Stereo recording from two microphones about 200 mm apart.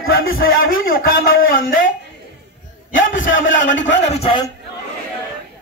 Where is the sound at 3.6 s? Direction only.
65° left (ahead or behind).